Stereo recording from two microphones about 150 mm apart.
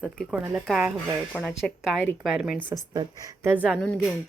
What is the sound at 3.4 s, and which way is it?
Speech, 10° right (ahead or behind).